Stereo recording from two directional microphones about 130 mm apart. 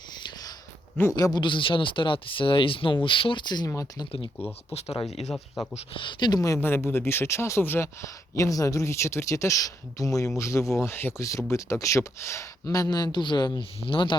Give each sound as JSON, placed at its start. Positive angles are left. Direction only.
{"t": 1.1, "sound": "speech", "side_deg": 35}
{"t": 3.7, "sound": "speech", "side_deg": 25}
{"t": 4.7, "sound": "speech", "side_deg": 55}
{"t": 5.7, "sound": "speech", "side_deg": 40}
{"t": 6.6, "sound": "speech", "side_deg": 15}